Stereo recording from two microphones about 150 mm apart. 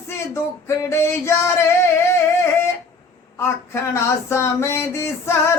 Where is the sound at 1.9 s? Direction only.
15° left (ahead or behind).